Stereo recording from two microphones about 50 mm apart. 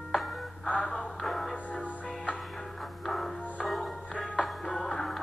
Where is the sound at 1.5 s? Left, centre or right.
Left.